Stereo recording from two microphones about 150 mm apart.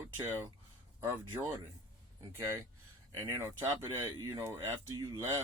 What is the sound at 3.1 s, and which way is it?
Speech, 15° right (ahead or behind).